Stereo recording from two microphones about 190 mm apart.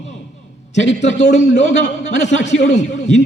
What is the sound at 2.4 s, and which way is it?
Speech, 40° left (ahead or behind).